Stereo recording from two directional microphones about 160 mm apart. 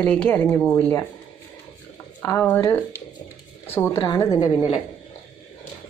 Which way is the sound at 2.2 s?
15° left (ahead or behind).